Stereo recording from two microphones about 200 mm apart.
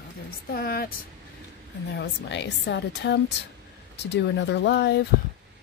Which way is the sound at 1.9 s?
60° left (ahead or behind).